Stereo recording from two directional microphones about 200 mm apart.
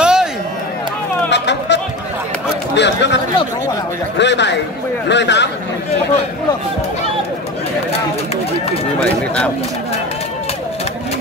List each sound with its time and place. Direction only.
0.0 s a sound: 5° right (ahead or behind)
1.3 s chatter: 60° left (ahead or behind)
2.7 s a man's voice: 60° left (ahead or behind)
4.2 s a man's voice: 60° left (ahead or behind)
9.0 s speech: 5° left (ahead or behind)